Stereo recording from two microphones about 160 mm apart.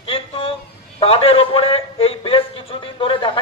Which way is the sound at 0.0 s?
35° left (ahead or behind).